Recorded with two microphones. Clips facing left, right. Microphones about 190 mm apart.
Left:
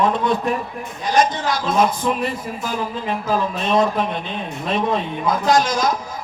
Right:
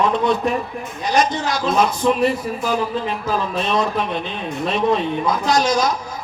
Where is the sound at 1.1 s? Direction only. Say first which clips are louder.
Left 1 dB; 50° left (ahead or behind).